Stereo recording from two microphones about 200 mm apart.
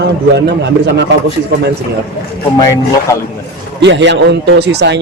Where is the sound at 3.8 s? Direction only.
60° right (ahead or behind).